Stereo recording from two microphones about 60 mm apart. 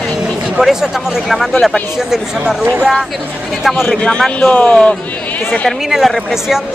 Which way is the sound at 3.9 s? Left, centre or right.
Centre.